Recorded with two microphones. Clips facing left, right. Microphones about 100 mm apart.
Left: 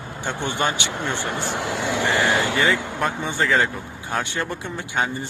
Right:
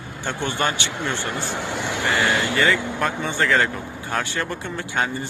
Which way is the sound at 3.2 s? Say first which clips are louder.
Right 1 dB; 15° left (ahead or behind).